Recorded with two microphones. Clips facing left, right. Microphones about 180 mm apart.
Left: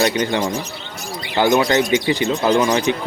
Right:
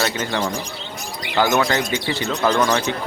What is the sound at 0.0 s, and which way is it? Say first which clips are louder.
Speech: left 4 dB; 15° left (ahead or behind).